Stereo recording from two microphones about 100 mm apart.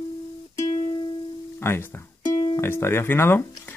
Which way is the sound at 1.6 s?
20° left (ahead or behind).